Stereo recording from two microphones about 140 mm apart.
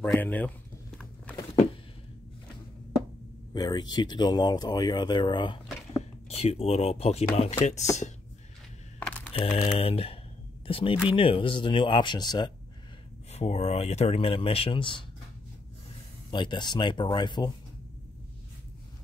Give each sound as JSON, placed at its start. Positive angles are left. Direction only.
{"t": 0.0, "sound": "speech", "side_deg": 10}
{"t": 3.5, "sound": "speech", "side_deg": 30}
{"t": 6.2, "sound": "speech", "side_deg": 45}
{"t": 9.3, "sound": "speech", "side_deg": 45}
{"t": 13.3, "sound": "speech", "side_deg": 50}
{"t": 16.3, "sound": "speech", "side_deg": 35}